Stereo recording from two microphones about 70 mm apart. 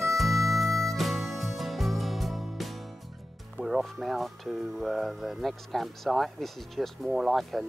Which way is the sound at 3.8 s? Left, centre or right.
Centre.